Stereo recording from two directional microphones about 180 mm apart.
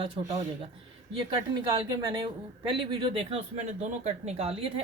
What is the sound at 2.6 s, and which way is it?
Speech, 30° right (ahead or behind).